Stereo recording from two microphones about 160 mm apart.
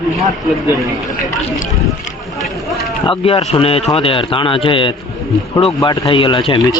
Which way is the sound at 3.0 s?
35° left (ahead or behind).